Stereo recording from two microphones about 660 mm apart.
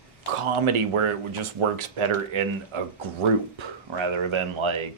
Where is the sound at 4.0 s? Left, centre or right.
Right.